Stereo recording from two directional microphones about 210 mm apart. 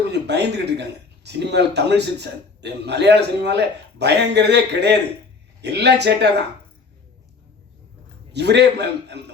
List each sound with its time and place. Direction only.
0.0 s a man's voice: 55° right (ahead or behind)
8.3 s a man's voice: 55° right (ahead or behind)